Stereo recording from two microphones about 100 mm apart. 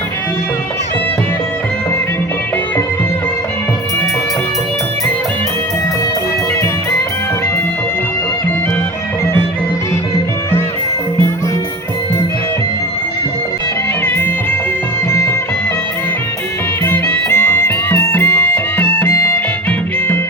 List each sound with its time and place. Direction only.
16.8 s music: 20° left (ahead or behind)